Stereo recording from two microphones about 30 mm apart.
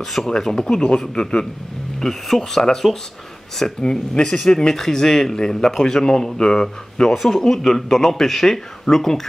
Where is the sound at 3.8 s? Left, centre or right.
Left.